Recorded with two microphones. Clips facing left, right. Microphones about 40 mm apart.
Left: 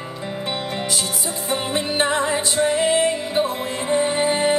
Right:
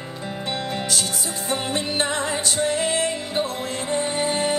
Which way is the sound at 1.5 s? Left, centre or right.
Centre.